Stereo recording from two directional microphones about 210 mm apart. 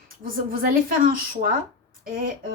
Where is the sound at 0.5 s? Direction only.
45° right (ahead or behind).